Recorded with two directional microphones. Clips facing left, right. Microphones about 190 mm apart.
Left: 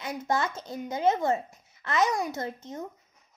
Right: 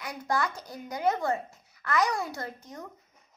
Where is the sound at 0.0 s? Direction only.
25° left (ahead or behind).